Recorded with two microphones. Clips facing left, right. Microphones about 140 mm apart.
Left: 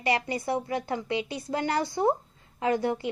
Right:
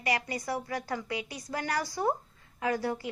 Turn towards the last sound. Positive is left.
turn(degrees=25)  # may be behind; listen again after turning